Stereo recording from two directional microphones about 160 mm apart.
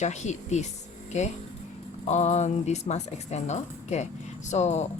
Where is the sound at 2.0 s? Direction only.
45° left (ahead or behind).